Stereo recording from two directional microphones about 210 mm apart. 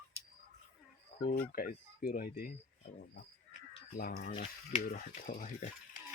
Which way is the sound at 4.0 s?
45° left (ahead or behind).